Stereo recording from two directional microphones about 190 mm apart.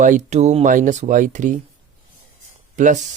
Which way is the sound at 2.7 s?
40° right (ahead or behind).